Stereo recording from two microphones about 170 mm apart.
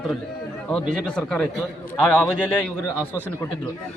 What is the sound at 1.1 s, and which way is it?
A man's voice, 5° left (ahead or behind).